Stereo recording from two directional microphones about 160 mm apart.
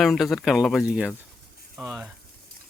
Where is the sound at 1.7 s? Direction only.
5° right (ahead or behind).